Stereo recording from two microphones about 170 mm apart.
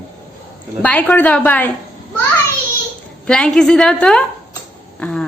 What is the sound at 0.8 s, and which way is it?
Speech, 10° left (ahead or behind).